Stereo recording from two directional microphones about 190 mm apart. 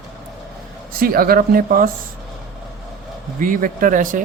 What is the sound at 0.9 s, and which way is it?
Speech, 50° right (ahead or behind).